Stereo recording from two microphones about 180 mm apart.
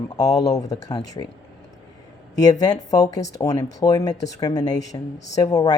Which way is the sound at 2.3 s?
20° left (ahead or behind).